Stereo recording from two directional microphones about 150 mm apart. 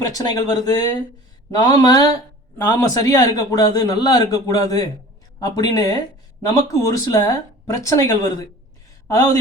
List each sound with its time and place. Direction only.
0.0 s a man's voice: 25° left (ahead or behind)